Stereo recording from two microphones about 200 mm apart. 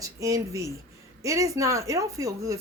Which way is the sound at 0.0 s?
15° right (ahead or behind).